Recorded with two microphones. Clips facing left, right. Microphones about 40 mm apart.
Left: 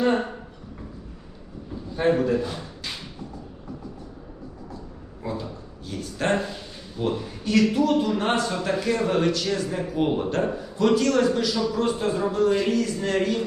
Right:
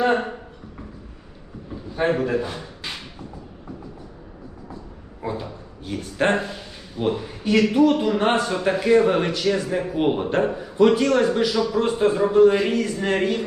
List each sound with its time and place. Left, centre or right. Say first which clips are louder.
0.0 s speech: right 2 dB; right
2.0 s a man's voice: even; right
5.2 s drawer open or close: right 2 dB; right
6.3 s a man's voice: right 1 dB; centre